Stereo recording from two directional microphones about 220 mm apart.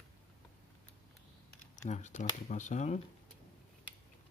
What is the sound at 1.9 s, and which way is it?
Speech, 35° left (ahead or behind).